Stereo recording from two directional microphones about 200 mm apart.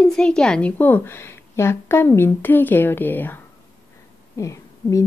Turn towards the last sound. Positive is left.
turn(degrees=15)  # may be behind; listen again after turning